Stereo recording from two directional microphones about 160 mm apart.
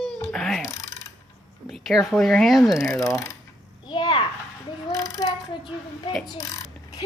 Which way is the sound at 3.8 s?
30° left (ahead or behind).